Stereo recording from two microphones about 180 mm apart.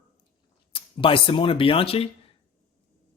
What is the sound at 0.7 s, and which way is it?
Speech, 30° left (ahead or behind).